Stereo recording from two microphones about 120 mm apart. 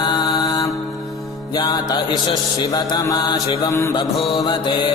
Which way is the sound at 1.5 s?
35° left (ahead or behind).